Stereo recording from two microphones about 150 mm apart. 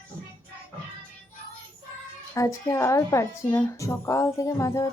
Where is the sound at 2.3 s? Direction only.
20° left (ahead or behind).